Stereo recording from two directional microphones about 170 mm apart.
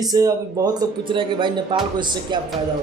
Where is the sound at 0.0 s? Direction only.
20° right (ahead or behind).